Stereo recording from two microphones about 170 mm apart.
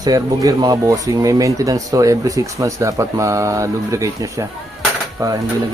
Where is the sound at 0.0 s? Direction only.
20° right (ahead or behind).